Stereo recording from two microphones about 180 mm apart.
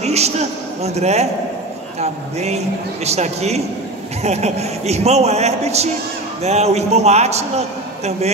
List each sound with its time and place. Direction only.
0.0 s a man's voice: 35° right (ahead or behind)